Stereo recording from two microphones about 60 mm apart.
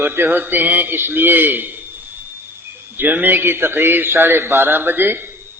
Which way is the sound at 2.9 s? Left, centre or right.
Right.